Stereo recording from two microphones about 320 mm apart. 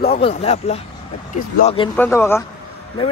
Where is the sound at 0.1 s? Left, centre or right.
Centre.